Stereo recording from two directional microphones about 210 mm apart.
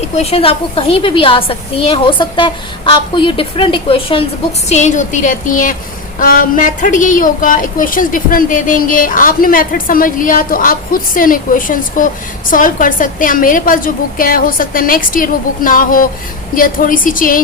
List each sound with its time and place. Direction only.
0.2 s a woman's voice: 30° left (ahead or behind)